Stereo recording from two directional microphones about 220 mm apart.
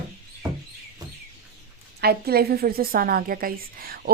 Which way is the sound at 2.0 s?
45° right (ahead or behind).